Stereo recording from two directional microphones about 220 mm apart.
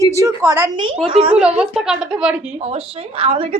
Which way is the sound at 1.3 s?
5° right (ahead or behind).